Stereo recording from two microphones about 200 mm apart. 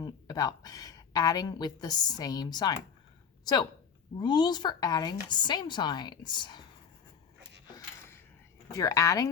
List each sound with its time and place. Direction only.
0.0 s a woman's voice: 20° left (ahead or behind)
8.7 s speech: 15° left (ahead or behind)